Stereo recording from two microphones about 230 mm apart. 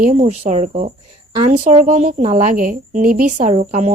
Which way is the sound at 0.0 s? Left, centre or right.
Right.